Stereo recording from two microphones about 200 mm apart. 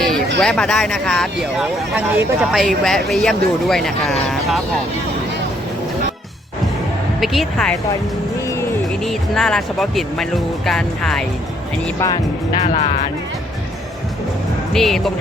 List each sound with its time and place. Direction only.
0.3 s speech: 5° left (ahead or behind)
7.2 s speech: centre (ahead or behind)
9.0 s speech: centre (ahead or behind)
11.9 s speech: 20° left (ahead or behind)
12.5 s speech: 30° left (ahead or behind)
14.7 s speech: centre (ahead or behind)